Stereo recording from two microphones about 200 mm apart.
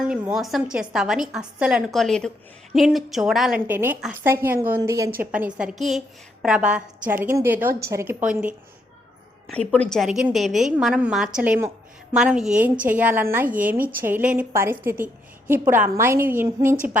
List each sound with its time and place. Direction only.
0.1 s a woman's voice: centre (ahead or behind)
9.5 s a woman's voice: 5° left (ahead or behind); by 16.7 s 10° right (ahead or behind)